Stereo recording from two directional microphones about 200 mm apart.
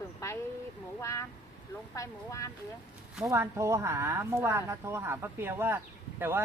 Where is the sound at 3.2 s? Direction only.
15° right (ahead or behind).